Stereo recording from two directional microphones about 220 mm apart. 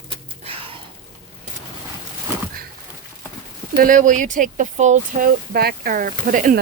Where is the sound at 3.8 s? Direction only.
35° right (ahead or behind).